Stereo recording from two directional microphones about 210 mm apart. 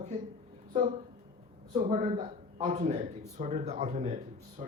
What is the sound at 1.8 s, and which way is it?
Speech, 35° right (ahead or behind).